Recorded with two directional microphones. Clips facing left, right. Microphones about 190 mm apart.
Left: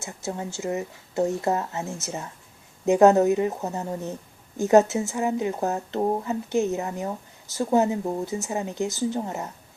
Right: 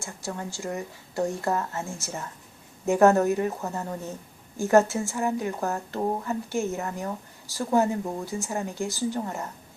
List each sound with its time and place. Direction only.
0.0 s speech: 20° left (ahead or behind)